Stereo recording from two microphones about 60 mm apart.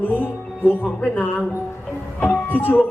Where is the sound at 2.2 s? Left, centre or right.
Left.